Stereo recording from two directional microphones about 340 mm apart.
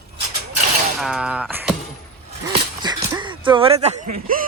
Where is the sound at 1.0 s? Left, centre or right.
Centre.